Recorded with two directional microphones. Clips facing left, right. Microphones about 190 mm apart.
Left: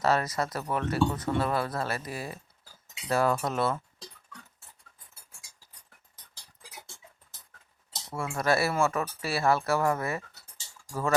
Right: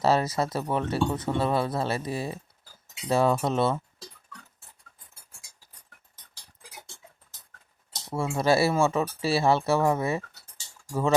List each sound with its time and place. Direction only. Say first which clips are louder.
0.0 s speech: right 3 dB; 30° right (ahead or behind)
8.1 s speech: right 4 dB; 25° right (ahead or behind)